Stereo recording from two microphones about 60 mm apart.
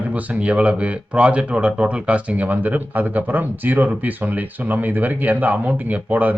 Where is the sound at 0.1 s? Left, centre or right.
Right.